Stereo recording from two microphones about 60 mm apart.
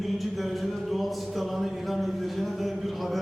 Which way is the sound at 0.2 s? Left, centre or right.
Centre.